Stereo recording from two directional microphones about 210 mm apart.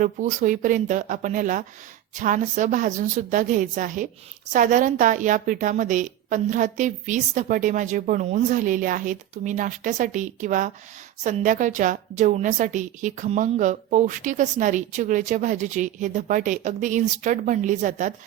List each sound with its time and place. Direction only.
0.0 s a woman's voice: 35° right (ahead or behind)